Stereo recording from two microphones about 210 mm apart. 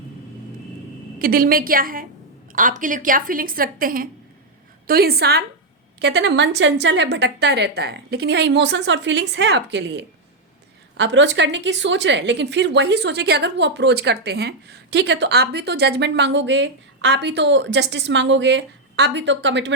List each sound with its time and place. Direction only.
1.2 s a woman's voice: 45° right (ahead or behind)